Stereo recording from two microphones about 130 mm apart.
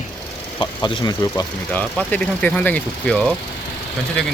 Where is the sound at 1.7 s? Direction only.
10° left (ahead or behind).